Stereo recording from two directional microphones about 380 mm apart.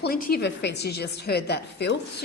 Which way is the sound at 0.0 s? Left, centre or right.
Left.